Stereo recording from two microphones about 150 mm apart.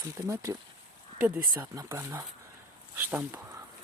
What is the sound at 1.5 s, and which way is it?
Speech, 20° right (ahead or behind).